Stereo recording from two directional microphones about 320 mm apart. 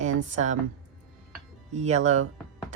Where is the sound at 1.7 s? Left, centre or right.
Right.